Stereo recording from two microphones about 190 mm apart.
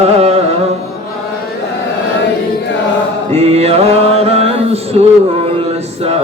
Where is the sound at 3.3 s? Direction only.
35° right (ahead or behind).